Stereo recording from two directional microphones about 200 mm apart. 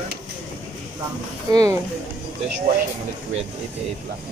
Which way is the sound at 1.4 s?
20° right (ahead or behind).